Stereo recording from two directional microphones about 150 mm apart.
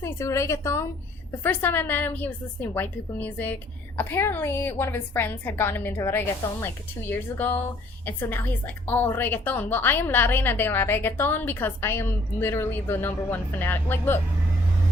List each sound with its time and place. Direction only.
0.0 s a woman's voice: 20° left (ahead or behind)